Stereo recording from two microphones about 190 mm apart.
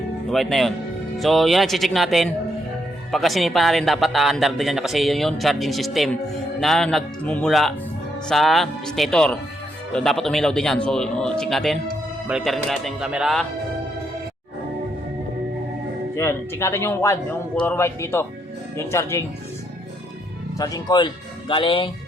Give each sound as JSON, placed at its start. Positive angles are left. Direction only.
{"t": 0.3, "sound": "speech", "side_deg": 0}
{"t": 16.1, "sound": "a man's voice", "side_deg": 15}
{"t": 20.6, "sound": "speech", "side_deg": 20}